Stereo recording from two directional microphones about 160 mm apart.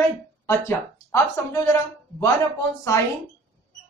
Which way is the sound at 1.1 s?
20° left (ahead or behind).